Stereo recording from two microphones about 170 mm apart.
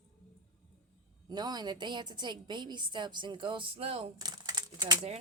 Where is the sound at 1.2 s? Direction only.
25° right (ahead or behind).